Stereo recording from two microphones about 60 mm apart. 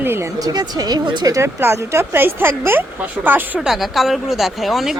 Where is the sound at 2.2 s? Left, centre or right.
Right.